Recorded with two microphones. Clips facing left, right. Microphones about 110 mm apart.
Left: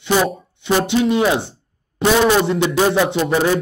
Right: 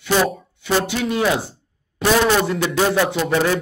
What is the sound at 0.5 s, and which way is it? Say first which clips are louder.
Speech: left 5 dB; 25° left (ahead or behind).